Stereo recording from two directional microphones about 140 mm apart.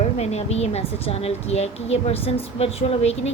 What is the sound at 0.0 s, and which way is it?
Speech, 50° left (ahead or behind).